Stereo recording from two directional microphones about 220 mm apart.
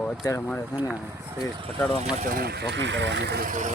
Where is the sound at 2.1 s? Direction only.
45° right (ahead or behind).